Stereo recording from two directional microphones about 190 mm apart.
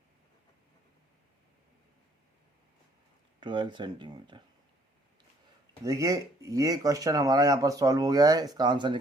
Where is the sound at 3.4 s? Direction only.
25° right (ahead or behind).